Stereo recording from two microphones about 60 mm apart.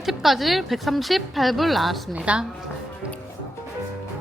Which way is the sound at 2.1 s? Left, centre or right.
Right.